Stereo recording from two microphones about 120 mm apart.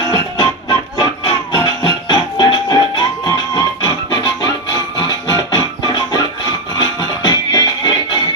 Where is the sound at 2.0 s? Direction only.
35° left (ahead or behind).